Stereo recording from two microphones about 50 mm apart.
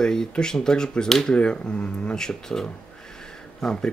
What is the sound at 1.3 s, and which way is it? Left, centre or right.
Speech, centre.